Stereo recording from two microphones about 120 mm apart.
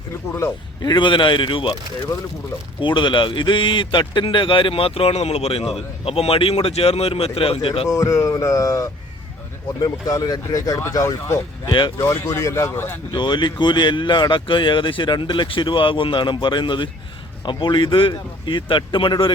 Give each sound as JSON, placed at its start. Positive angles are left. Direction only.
{"t": 0.8, "sound": "speech", "side_deg": 40}
{"t": 2.8, "sound": "speech", "side_deg": 45}
{"t": 7.9, "sound": "speech", "side_deg": 25}
{"t": 13.1, "sound": "speech", "side_deg": 40}